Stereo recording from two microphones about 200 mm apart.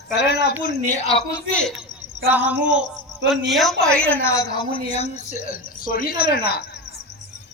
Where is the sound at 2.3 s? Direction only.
10° right (ahead or behind).